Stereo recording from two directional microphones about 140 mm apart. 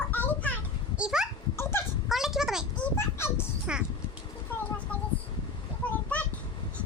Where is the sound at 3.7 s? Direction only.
5° right (ahead or behind).